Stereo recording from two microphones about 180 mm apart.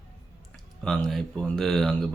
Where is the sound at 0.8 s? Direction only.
5° left (ahead or behind).